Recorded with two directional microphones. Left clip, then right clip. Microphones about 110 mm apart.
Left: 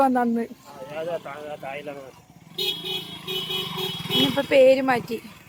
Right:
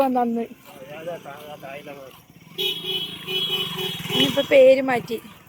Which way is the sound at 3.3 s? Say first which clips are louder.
Right 5 dB; 30° right (ahead or behind).